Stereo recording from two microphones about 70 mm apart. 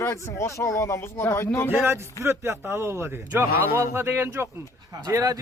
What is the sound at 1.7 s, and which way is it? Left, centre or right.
A man's voice, right.